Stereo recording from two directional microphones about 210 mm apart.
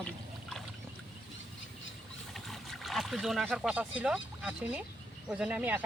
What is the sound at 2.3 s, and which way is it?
Speech, centre (ahead or behind).